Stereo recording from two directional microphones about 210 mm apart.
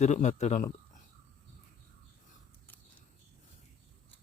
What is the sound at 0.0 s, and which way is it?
Speech, 35° left (ahead or behind).